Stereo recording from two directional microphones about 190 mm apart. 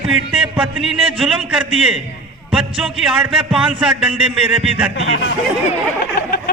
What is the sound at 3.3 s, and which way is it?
Speech, 30° right (ahead or behind).